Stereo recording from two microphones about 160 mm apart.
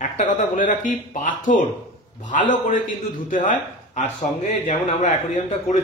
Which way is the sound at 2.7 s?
60° left (ahead or behind).